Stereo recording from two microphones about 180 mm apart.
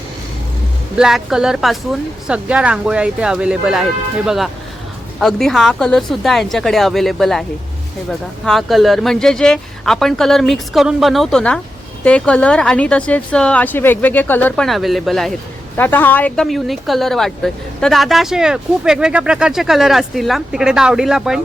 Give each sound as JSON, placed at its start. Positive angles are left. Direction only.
{"t": 0.9, "sound": "speech", "side_deg": -5}
{"t": 5.2, "sound": "speech", "side_deg": 0}
{"t": 8.4, "sound": "a woman's voice", "side_deg": 0}